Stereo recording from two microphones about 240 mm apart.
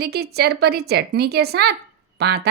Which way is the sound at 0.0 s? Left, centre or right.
Right.